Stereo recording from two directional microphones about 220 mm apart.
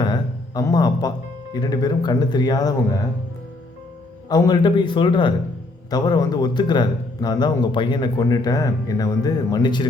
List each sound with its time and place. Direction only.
0.0 s a sound: 15° left (ahead or behind)
1.5 s a man's voice: 20° left (ahead or behind)
4.3 s a man's voice: 15° left (ahead or behind)